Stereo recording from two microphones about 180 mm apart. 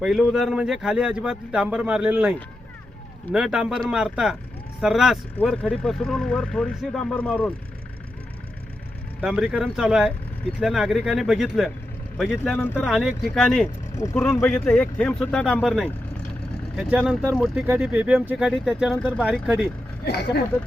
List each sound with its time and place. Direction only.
0.0 s speech: centre (ahead or behind)
3.3 s speech: 5° right (ahead or behind)
9.2 s speech: 5° right (ahead or behind)
12.5 s speech: 10° left (ahead or behind)
12.9 s speech: centre (ahead or behind)
13.9 s speech: 15° left (ahead or behind)
19.2 s speech: 5° right (ahead or behind)
20.1 s speech: 65° left (ahead or behind)